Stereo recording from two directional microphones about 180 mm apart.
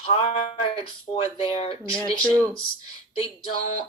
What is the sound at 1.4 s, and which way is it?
Speech, 30° left (ahead or behind).